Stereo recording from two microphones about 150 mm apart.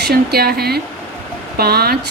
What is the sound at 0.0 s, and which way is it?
Speech, 90° right.